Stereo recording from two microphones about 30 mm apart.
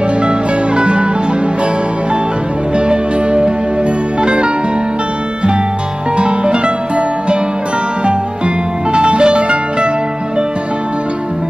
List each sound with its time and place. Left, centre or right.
0.3 s music: right
2.9 s music: right
6.1 s music: right
8.9 s music: right